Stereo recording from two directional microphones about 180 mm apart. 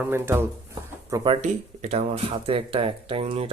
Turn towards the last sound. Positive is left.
turn(degrees=-30)  # may be behind; listen again after turning